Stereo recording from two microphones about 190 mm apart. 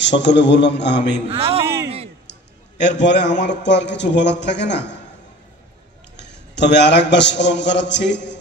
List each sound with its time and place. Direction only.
0.0 s a man's voice: 70° left (ahead or behind)
1.3 s a man's voice: 30° right (ahead or behind)
1.6 s a sound: 15° right (ahead or behind)
2.8 s a man's voice: 65° left (ahead or behind)
6.1 s a man's voice: 65° left (ahead or behind)